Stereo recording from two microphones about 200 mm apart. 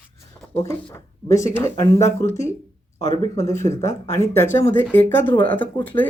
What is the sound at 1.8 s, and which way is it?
Speech, 35° left (ahead or behind).